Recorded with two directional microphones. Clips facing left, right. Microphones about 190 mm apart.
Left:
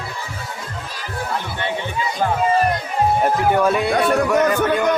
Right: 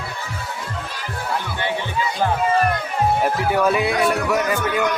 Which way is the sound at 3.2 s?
5° right (ahead or behind).